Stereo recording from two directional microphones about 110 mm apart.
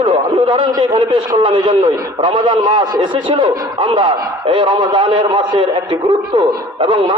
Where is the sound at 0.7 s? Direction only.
45° right (ahead or behind).